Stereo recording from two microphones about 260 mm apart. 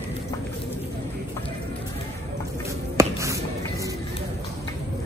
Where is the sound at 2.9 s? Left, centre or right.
Centre.